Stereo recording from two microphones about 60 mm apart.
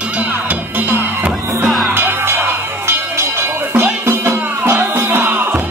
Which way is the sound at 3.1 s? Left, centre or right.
Right.